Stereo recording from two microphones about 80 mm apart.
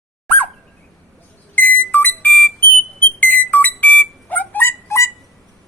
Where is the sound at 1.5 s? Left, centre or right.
Left.